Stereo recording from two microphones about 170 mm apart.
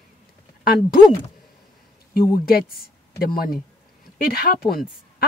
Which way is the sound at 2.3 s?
60° left (ahead or behind).